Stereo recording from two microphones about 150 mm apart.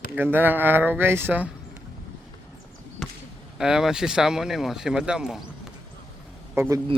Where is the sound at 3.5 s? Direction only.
5° right (ahead or behind).